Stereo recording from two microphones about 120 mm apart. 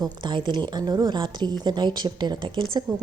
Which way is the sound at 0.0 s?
40° right (ahead or behind).